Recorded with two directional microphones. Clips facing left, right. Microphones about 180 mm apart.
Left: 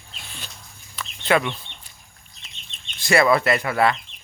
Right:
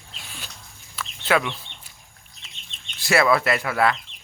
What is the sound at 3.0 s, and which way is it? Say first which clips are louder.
Speech: left 2 dB; centre (ahead or behind).